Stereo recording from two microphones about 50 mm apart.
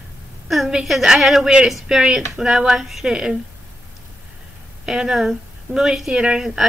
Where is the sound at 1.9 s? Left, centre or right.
Centre.